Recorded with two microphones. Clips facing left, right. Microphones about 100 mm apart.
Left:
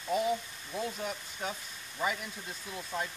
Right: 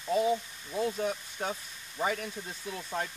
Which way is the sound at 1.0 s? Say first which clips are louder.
Right 4 dB; 35° right (ahead or behind).